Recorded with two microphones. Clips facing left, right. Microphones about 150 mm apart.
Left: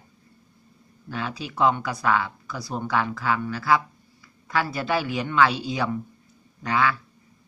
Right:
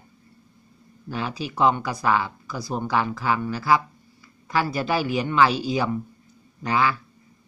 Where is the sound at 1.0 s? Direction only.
5° right (ahead or behind).